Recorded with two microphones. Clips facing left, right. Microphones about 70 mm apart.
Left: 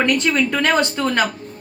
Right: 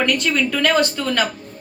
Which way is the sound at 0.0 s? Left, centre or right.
Left.